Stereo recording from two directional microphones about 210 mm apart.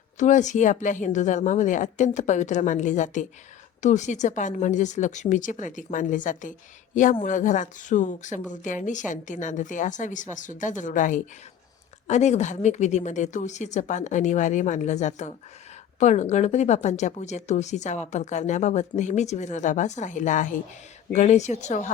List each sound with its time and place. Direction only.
0.2 s speech: 35° left (ahead or behind)